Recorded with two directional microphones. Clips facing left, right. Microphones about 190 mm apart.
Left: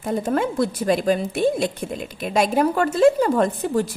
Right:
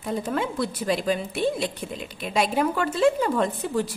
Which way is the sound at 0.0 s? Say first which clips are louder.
Left 5 dB; 45° left (ahead or behind).